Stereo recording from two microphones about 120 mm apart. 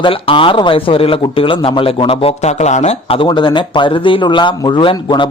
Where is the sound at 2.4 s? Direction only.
70° left (ahead or behind).